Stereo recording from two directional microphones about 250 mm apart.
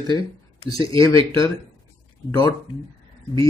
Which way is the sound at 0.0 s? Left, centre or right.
Centre.